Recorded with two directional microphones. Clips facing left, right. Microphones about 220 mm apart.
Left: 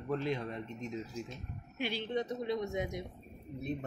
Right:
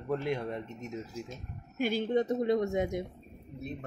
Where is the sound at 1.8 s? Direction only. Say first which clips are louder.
Right 7 dB; 45° right (ahead or behind).